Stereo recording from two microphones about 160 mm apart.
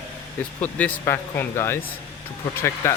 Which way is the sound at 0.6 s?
10° left (ahead or behind).